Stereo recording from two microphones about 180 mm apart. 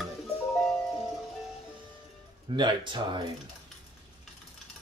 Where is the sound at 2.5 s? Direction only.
25° right (ahead or behind).